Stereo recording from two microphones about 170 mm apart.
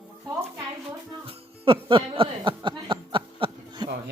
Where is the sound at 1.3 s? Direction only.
30° right (ahead or behind).